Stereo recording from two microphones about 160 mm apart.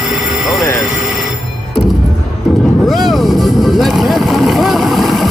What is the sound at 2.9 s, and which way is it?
Vehicle, centre (ahead or behind).